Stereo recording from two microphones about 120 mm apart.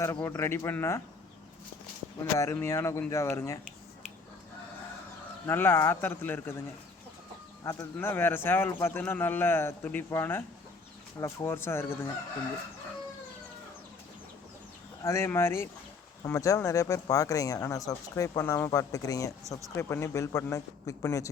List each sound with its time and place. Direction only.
0.0 s speech: 25° left (ahead or behind)
2.3 s speech: 25° left (ahead or behind)
5.5 s speech: 20° left (ahead or behind)
7.6 s a man's voice: 25° left (ahead or behind)
15.0 s speech: 20° left (ahead or behind)